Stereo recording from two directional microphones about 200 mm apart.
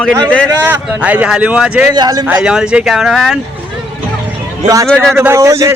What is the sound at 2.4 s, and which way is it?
Speech, 5° right (ahead or behind).